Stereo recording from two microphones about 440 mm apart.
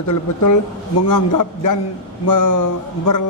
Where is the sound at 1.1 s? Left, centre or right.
Left.